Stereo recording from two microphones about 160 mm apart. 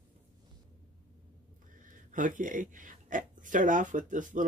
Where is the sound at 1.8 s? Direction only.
55° right (ahead or behind).